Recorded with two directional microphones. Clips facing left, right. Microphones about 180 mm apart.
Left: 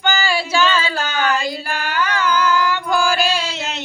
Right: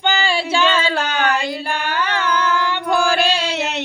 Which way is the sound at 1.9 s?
25° right (ahead or behind).